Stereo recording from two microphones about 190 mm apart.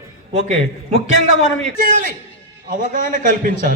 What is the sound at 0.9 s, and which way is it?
Speech, 90° left.